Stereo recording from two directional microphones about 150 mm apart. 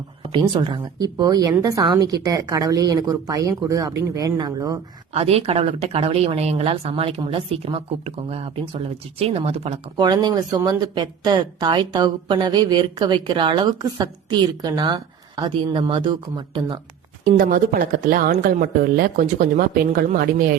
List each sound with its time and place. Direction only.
0.3 s speech: 30° right (ahead or behind)
5.1 s a woman's voice: 40° right (ahead or behind)
10.0 s speech: 30° right (ahead or behind)
17.3 s speech: 70° right (ahead or behind)